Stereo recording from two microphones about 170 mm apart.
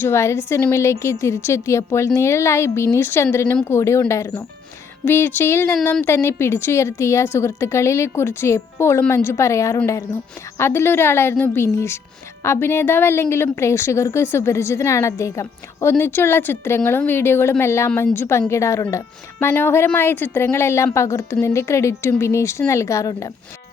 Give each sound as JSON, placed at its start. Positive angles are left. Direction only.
{"t": 0.0, "sound": "a woman's voice", "side_deg": 15}